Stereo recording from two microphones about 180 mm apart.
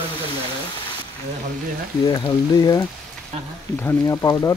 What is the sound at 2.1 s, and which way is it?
Speech, 20° left (ahead or behind).